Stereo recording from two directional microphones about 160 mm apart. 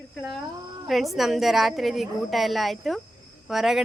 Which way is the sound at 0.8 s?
Centre (ahead or behind).